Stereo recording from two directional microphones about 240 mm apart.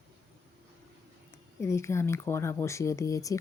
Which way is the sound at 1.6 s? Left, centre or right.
Centre.